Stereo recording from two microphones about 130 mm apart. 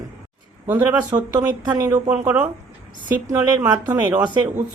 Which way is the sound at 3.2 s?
30° right (ahead or behind).